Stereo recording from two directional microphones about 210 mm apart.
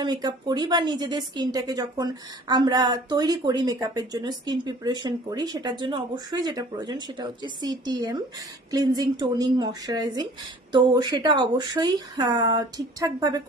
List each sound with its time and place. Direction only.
0.0 s a woman's voice: 20° right (ahead or behind)